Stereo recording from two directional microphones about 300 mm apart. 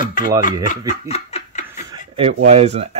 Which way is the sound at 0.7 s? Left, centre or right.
Left.